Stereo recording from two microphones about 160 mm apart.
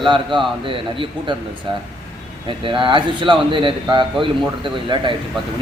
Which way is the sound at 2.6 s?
30° right (ahead or behind).